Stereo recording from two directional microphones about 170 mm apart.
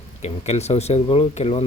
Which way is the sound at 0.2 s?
40° left (ahead or behind).